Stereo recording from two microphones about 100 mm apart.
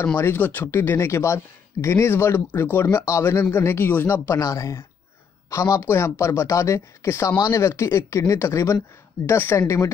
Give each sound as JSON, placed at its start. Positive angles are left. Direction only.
{"t": 0.0, "sound": "speech", "side_deg": 20}